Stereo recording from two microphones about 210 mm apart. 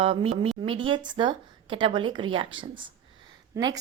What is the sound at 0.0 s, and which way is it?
Speech, 25° right (ahead or behind).